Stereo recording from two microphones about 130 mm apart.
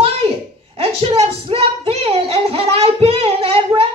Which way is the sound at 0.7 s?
50° right (ahead or behind).